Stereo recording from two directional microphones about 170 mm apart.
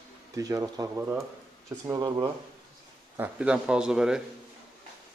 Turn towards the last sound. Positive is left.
turn(degrees=-5)  # may be behind; listen again after turning